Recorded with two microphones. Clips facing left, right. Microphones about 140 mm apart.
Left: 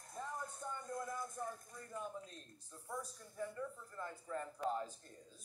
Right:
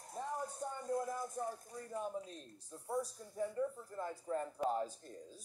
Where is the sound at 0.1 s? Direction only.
35° right (ahead or behind).